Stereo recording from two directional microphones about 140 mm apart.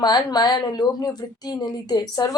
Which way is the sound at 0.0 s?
30° left (ahead or behind).